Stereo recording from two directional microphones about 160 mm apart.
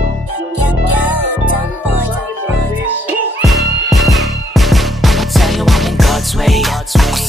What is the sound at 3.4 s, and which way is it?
Music, centre (ahead or behind).